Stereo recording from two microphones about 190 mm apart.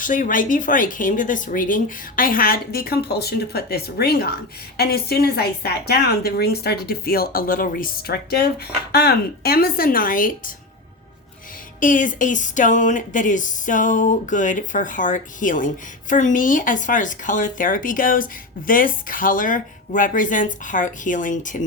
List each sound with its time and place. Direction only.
0.0 s speech: 45° left (ahead or behind)
11.8 s speech: 45° left (ahead or behind)